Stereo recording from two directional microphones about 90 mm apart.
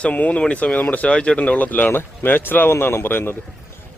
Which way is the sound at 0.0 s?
15° left (ahead or behind).